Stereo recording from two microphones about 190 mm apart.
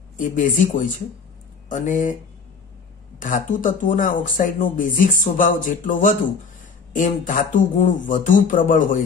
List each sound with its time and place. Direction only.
0.2 s speech: 45° left (ahead or behind)
3.2 s speech: 45° left (ahead or behind)